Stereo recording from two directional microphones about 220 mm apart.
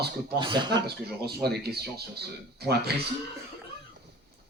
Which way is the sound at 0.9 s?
45° right (ahead or behind).